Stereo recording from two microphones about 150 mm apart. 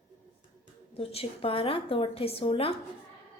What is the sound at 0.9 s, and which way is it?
A woman's voice, 40° left (ahead or behind).